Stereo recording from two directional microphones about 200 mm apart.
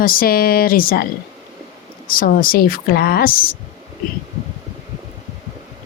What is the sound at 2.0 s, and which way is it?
Speech, 45° left (ahead or behind).